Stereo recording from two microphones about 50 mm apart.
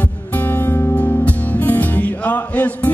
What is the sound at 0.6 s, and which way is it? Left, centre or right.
Music, left.